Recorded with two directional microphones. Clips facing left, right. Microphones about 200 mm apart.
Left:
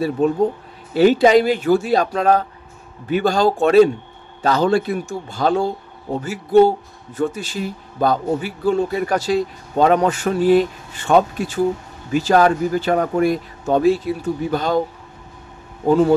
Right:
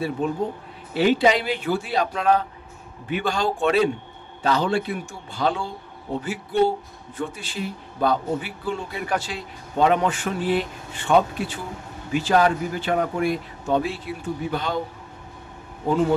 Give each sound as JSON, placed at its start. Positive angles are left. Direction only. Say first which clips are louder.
{"t": 0.2, "sound": "a man's voice", "louder": "left 8 dB", "side_deg": 40}